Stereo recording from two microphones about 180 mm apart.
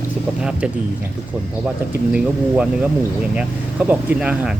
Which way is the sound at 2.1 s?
5° right (ahead or behind).